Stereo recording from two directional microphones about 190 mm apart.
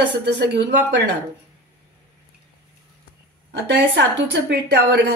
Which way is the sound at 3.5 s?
65° right (ahead or behind).